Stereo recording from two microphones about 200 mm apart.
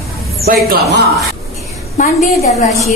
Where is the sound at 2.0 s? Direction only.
40° left (ahead or behind).